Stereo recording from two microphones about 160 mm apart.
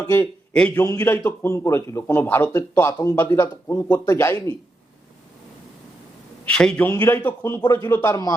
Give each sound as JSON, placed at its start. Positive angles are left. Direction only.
{"t": 0.7, "sound": "a man's voice", "side_deg": 20}
{"t": 6.5, "sound": "a man's voice", "side_deg": 5}